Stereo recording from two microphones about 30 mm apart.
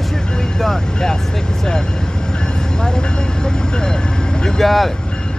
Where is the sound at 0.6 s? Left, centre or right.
Centre.